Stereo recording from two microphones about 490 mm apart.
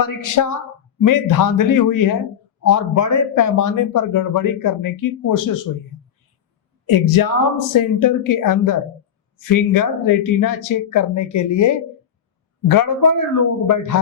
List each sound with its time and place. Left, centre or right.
0.0 s a man's voice: left
6.8 s a man's voice: left